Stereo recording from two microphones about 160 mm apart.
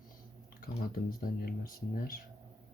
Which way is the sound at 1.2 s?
65° left (ahead or behind).